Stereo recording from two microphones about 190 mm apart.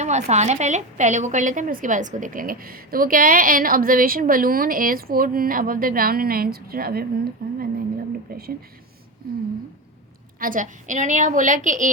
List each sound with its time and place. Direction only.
0.0 s a woman's voice: 35° right (ahead or behind)
10.4 s a woman's voice: 45° right (ahead or behind)